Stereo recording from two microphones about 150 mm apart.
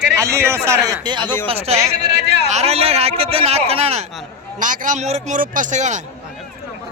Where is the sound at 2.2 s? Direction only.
90° right.